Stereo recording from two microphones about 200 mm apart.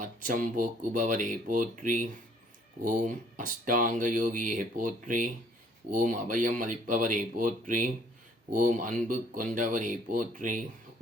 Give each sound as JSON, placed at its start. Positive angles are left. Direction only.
{"t": 0.0, "sound": "speech", "side_deg": -40}